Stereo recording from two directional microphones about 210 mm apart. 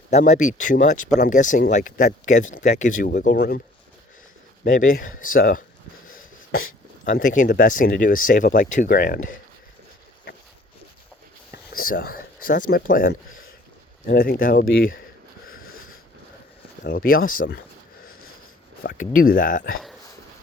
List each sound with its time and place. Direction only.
0.1 s speech: 35° left (ahead or behind)
4.6 s speech: 40° left (ahead or behind)
11.7 s a sound: 45° left (ahead or behind)
12.7 s speech: 45° left (ahead or behind)
15.4 s a sound: 45° left (ahead or behind)
16.8 s speech: 45° left (ahead or behind)
18.8 s speech: 40° left (ahead or behind)